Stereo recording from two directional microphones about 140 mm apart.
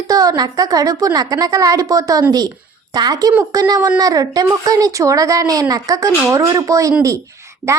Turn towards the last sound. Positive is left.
turn(degrees=-20)  # may be behind; listen again after turning